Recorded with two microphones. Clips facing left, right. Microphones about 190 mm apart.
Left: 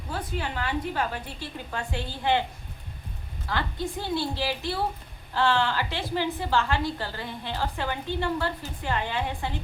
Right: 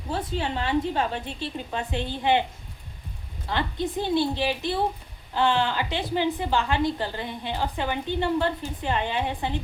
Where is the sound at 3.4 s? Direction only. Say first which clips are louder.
Right 3 dB; 20° right (ahead or behind).